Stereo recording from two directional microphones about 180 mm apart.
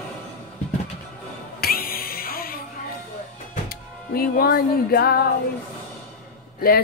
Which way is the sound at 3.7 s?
55° left (ahead or behind).